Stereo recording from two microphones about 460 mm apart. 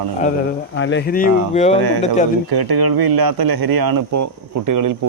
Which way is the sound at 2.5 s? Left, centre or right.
Right.